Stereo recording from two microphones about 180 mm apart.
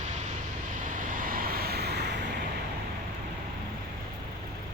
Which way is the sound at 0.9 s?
50° right (ahead or behind).